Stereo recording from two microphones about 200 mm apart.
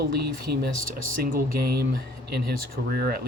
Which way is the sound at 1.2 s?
50° right (ahead or behind).